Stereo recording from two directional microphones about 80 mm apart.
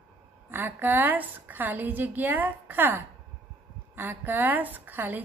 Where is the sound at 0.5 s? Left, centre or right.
Right.